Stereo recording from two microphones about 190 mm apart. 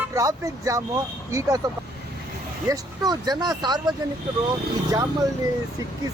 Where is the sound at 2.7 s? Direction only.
20° right (ahead or behind).